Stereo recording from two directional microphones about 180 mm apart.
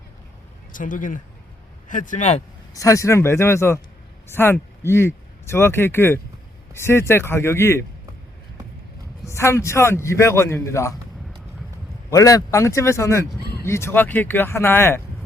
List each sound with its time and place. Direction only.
0.7 s speech: 45° left (ahead or behind)
2.7 s speech: 20° left (ahead or behind)
9.2 s speech: 15° left (ahead or behind)
12.1 s speech: 20° left (ahead or behind)